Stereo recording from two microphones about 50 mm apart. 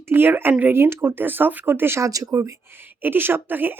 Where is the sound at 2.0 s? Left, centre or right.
Right.